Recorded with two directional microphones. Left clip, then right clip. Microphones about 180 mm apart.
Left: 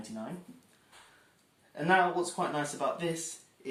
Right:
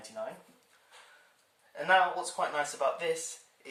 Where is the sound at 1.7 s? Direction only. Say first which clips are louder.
Right 1 dB; 15° left (ahead or behind).